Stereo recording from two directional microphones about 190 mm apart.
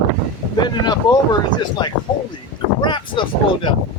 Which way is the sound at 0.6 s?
20° left (ahead or behind).